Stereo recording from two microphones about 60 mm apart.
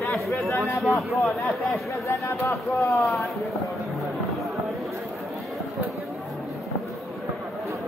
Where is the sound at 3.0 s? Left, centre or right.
Centre.